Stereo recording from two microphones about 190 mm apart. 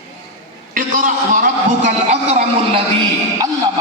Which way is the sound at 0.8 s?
45° right (ahead or behind).